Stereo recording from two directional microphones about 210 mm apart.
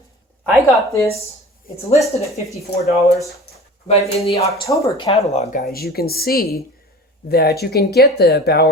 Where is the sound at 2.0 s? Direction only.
15° left (ahead or behind).